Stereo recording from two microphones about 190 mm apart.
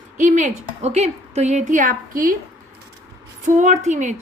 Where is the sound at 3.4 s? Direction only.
40° right (ahead or behind).